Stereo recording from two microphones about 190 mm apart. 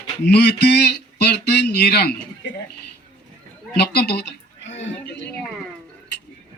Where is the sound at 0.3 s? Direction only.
60° left (ahead or behind).